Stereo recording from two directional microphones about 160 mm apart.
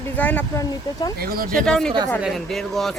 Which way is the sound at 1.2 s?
65° right (ahead or behind).